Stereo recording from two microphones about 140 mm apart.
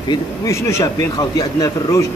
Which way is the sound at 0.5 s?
20° left (ahead or behind).